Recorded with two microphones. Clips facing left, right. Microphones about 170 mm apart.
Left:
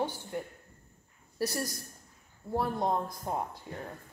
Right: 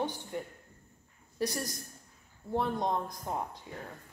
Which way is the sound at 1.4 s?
5° left (ahead or behind).